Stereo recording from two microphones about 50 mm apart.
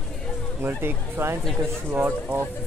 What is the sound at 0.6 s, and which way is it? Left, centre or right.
Speech, right.